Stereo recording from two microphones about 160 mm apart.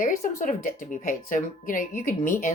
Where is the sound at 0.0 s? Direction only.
55° left (ahead or behind).